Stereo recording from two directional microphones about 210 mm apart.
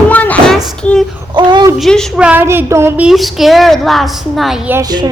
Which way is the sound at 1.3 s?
20° right (ahead or behind).